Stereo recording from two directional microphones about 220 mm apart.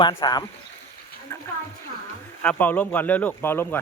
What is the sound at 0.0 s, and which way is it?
Speech, 20° left (ahead or behind).